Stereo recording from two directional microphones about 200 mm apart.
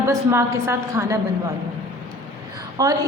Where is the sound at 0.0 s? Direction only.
15° right (ahead or behind).